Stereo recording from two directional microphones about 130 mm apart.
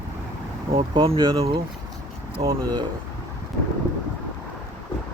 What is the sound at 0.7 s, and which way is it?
Speech, 45° right (ahead or behind).